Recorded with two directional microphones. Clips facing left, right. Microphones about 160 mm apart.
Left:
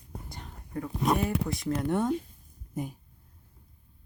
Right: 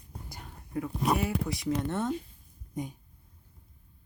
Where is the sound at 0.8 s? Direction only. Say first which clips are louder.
Left 2 dB; 5° right (ahead or behind); by 2.1 s 10° left (ahead or behind).